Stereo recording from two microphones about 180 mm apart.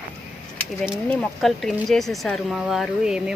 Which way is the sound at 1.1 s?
5° left (ahead or behind).